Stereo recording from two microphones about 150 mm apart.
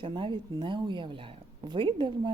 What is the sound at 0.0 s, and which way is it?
Speech, 30° right (ahead or behind).